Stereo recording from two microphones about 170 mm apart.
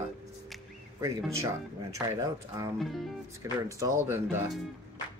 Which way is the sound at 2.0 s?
20° right (ahead or behind).